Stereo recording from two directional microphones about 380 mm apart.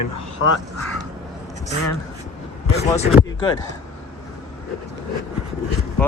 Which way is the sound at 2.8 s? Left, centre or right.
Centre.